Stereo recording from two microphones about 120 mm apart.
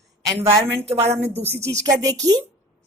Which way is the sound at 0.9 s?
60° right (ahead or behind).